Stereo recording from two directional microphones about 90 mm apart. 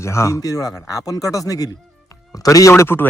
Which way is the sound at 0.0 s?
35° left (ahead or behind).